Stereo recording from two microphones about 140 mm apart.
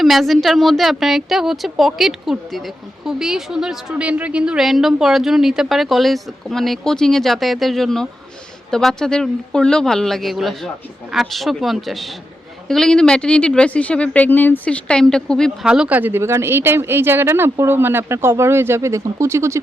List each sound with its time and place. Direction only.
0.0 s a woman's voice: centre (ahead or behind)
15.6 s speech: 5° right (ahead or behind)